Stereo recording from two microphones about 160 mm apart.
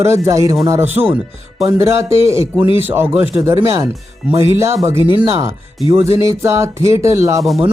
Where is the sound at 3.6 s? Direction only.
20° right (ahead or behind).